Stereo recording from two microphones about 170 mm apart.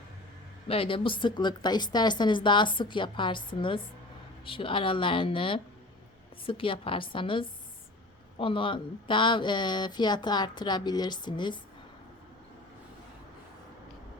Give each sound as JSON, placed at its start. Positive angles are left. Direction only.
{"t": 0.7, "sound": "a woman's voice", "side_deg": 30}